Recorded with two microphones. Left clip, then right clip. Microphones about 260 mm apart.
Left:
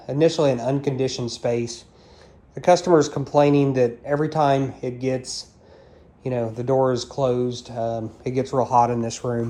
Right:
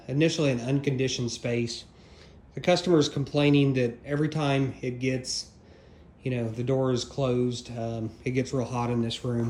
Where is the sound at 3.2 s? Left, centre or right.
Left.